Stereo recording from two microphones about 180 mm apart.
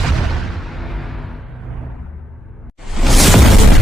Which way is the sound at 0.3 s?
Centre (ahead or behind).